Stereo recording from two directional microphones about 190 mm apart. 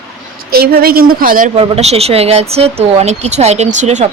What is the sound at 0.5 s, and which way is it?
Speech, 55° right (ahead or behind).